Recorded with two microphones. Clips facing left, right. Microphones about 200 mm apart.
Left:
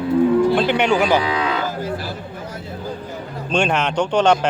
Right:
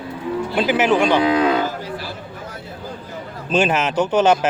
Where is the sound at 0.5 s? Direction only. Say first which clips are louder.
Even; 5° right (ahead or behind).